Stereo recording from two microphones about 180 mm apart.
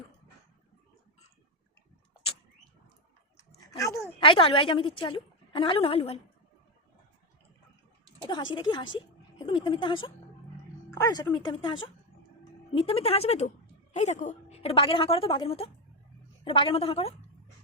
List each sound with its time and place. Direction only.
3.3 s dog: 20° left (ahead or behind)
4.2 s a woman's voice: 30° left (ahead or behind)
8.2 s a woman's voice: 25° left (ahead or behind)
10.9 s a woman's voice: 20° left (ahead or behind); by 17.2 s 35° left (ahead or behind)